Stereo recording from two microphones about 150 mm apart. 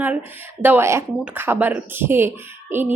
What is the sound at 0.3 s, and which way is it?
Speech, 15° right (ahead or behind).